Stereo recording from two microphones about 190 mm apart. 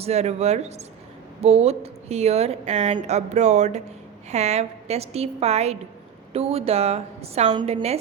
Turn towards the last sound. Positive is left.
turn(degrees=-35)  # may be behind; listen again after turning